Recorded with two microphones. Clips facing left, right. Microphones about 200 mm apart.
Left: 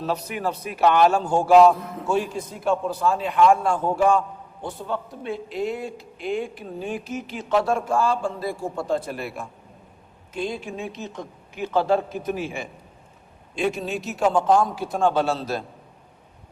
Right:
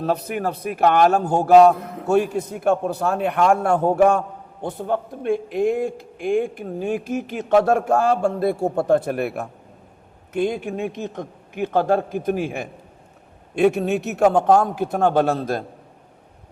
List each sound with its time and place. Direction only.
0.0 s a man's voice: 55° right (ahead or behind)
1.3 s mantra: 40° right (ahead or behind)
1.7 s a man's voice: 60° right (ahead or behind)
13.6 s a man's voice: 65° right (ahead or behind)